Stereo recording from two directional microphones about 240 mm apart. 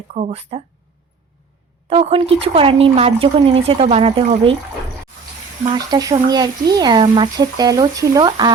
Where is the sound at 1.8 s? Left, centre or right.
Right.